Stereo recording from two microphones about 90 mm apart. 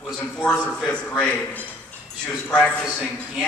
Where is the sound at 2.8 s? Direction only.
Centre (ahead or behind).